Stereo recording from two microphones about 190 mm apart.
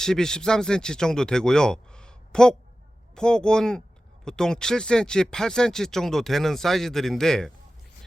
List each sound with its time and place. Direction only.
0.0 s speech: 5° left (ahead or behind)